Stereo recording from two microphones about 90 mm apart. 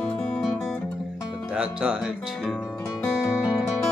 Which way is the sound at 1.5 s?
10° right (ahead or behind).